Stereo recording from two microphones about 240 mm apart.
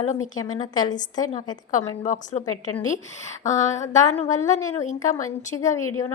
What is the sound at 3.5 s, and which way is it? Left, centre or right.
A woman's voice, left.